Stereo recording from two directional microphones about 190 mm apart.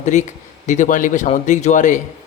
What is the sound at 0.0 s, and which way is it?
A man's voice, 40° left (ahead or behind).